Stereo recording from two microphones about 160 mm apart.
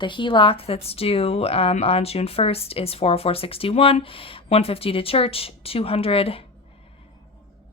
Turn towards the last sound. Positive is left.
turn(degrees=35)  # may be behind; listen again after turning